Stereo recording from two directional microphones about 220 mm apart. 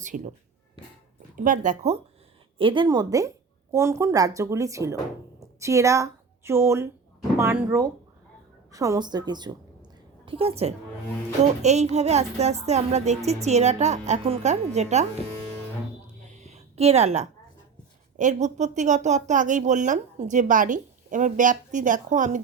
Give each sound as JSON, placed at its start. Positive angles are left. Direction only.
{"t": 0.0, "sound": "speech", "side_deg": -35}
{"t": 1.4, "sound": "a woman's voice", "side_deg": -35}
{"t": 16.2, "sound": "a sound", "side_deg": -30}
{"t": 18.2, "sound": "speech", "side_deg": -35}